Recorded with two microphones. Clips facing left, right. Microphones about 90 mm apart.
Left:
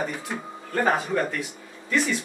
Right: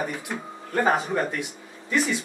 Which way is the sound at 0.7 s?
20° right (ahead or behind).